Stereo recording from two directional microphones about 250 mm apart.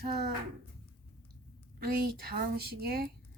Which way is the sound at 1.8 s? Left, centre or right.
Right.